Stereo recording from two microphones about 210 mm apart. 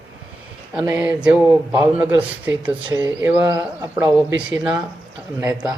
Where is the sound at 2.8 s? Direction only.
20° right (ahead or behind).